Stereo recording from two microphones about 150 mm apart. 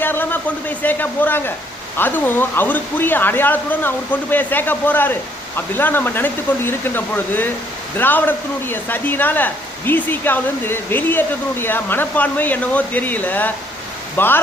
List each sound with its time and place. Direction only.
0.0 s speech: 15° left (ahead or behind)